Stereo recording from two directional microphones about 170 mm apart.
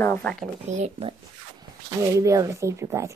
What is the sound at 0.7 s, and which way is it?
Speech, 40° right (ahead or behind).